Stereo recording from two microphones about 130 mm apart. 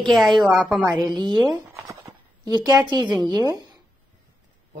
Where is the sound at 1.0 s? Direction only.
35° right (ahead or behind).